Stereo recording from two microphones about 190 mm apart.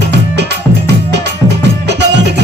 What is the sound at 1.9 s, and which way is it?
Music, 65° right (ahead or behind).